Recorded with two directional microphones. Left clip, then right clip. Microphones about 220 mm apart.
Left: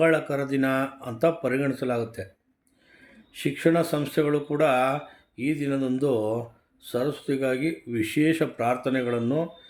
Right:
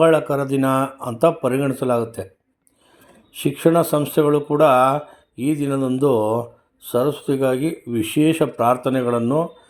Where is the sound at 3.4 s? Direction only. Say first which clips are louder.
Right 6 dB; 20° right (ahead or behind).